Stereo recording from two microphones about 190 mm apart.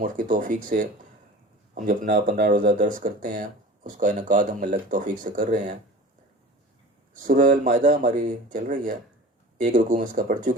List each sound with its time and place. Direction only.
0.0 s speech: 45° right (ahead or behind)
7.1 s speech: 45° right (ahead or behind)